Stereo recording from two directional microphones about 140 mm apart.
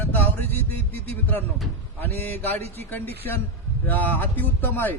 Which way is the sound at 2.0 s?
15° left (ahead or behind).